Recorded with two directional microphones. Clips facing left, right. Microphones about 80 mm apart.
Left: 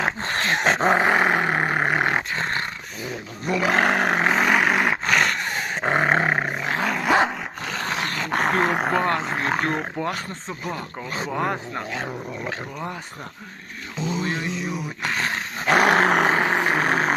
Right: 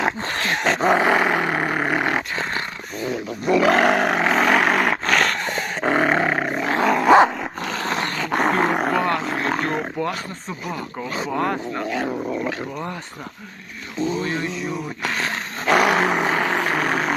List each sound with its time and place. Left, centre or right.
0.3 s dog: left
3.8 s roar: left
4.3 s dog: centre
6.5 s roar: centre
7.9 s dog: centre
9.0 s a sound: left
9.4 s roaring cats: centre
10.0 s wild animals: left
11.4 s speech: centre
14.0 s dog: centre; by 16.1 s left
16.2 s a sound: left